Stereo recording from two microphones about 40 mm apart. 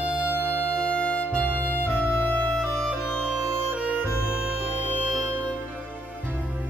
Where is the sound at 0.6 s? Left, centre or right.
Left.